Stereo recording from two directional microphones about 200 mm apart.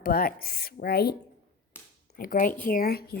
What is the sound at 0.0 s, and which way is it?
Speech, 50° left (ahead or behind).